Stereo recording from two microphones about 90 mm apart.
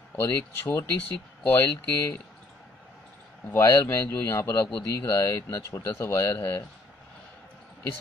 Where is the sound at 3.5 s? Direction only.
35° left (ahead or behind).